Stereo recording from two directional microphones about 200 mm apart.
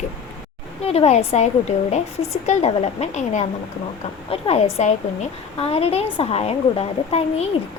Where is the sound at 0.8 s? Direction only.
30° left (ahead or behind).